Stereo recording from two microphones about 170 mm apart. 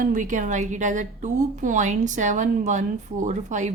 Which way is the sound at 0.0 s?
45° right (ahead or behind).